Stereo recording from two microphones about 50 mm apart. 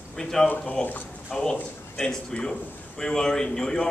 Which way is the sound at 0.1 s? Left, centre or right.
Centre.